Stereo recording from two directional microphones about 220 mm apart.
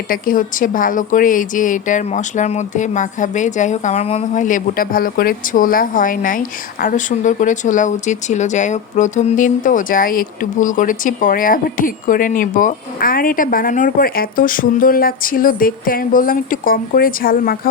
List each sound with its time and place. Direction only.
0.1 s a woman's voice: 40° left (ahead or behind)